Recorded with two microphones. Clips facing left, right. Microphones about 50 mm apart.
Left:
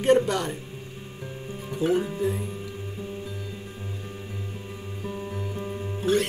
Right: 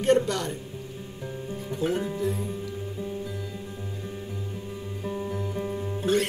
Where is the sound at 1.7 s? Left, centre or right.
Centre.